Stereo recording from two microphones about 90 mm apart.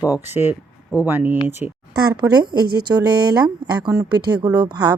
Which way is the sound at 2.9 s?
50° right (ahead or behind).